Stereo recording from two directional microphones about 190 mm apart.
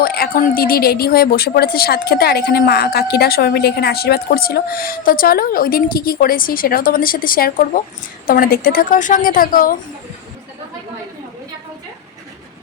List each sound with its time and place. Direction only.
0.0 s a woman's voice: 50° left (ahead or behind)